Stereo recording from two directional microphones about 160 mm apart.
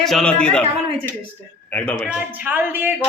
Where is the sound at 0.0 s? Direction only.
Centre (ahead or behind).